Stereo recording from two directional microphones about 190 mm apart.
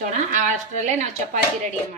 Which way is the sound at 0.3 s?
40° right (ahead or behind).